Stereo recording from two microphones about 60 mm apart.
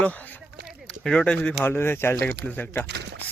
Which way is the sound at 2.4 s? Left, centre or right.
Left.